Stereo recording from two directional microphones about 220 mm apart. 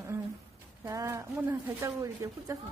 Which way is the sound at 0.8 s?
15° right (ahead or behind).